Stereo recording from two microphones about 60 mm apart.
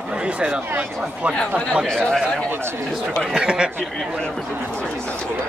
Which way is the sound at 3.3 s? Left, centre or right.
Centre.